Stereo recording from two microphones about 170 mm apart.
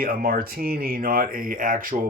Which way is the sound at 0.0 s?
60° right (ahead or behind).